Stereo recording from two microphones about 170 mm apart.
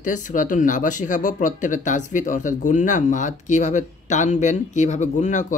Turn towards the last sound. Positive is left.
turn(degrees=45)  # may be behind; listen again after turning